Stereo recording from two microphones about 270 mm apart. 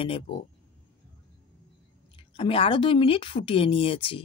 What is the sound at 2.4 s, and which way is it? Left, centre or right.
A woman's voice, centre.